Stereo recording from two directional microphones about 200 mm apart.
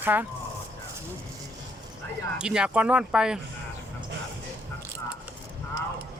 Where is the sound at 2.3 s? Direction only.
5° right (ahead or behind).